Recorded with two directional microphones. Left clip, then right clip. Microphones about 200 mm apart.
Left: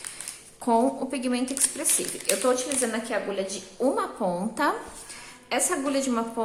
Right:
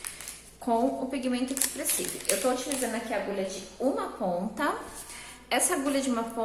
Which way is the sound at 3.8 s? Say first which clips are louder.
Left 4 dB; 35° left (ahead or behind).